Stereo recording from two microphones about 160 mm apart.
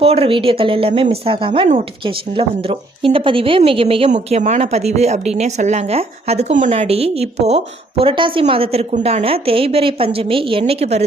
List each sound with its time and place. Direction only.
0.0 s a woman's voice: 40° right (ahead or behind)